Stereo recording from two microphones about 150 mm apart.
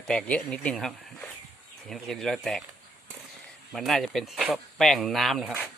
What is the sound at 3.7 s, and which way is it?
Speech, centre (ahead or behind).